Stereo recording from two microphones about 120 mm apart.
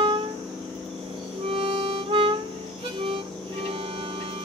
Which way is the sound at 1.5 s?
50° right (ahead or behind).